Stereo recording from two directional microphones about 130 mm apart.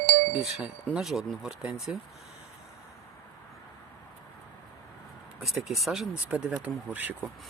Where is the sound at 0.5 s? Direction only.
5° right (ahead or behind).